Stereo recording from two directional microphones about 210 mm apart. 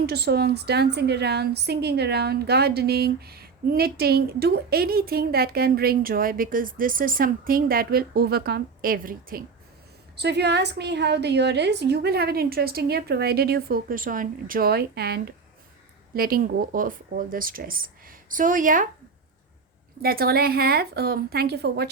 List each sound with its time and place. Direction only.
0.0 s a woman's voice: 50° right (ahead or behind)
20.0 s a woman's voice: 45° right (ahead or behind)